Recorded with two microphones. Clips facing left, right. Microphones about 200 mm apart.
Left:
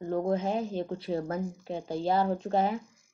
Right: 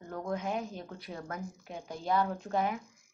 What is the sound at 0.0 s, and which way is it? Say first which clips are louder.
Speech: left 8 dB; 30° left (ahead or behind).